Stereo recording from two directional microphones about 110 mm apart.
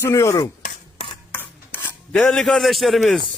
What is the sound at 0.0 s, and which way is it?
Speech, 25° left (ahead or behind).